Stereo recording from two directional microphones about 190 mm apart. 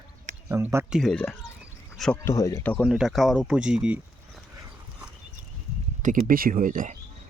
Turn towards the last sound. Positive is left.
turn(degrees=-45)  # may be behind; listen again after turning